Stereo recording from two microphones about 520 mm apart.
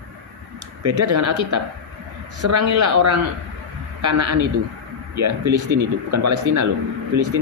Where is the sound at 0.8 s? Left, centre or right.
Right.